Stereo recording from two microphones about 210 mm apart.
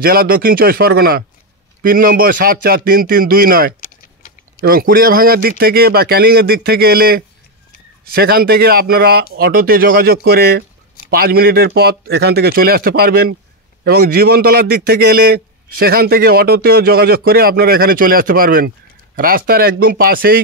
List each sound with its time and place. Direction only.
0.0 s a man's voice: 45° right (ahead or behind)